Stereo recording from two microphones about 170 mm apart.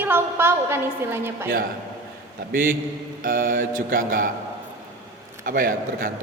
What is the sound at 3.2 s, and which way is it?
Mantra, 55° right (ahead or behind).